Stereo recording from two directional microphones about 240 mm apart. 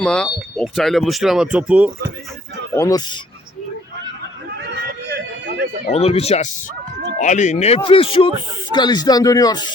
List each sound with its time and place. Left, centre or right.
0.0 s speech: centre
2.7 s a man's voice: centre
4.6 s a sound: right
5.9 s a man's voice: left